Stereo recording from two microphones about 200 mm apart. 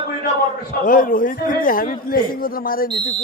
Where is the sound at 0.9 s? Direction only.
45° left (ahead or behind).